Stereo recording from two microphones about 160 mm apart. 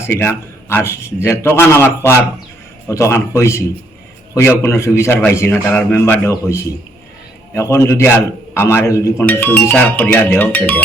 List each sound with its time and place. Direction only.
0.0 s speech: 15° left (ahead or behind)